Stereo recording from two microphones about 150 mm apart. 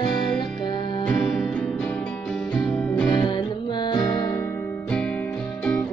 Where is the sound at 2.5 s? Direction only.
10° left (ahead or behind).